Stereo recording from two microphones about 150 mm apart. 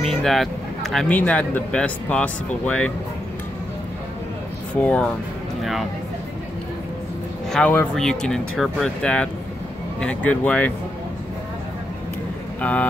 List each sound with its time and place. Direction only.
0.0 s speech: 5° left (ahead or behind)
4.7 s speech: 10° left (ahead or behind)
5.6 s speech: centre (ahead or behind)
7.5 s speech: 10° left (ahead or behind)
12.6 s speech: 10° left (ahead or behind)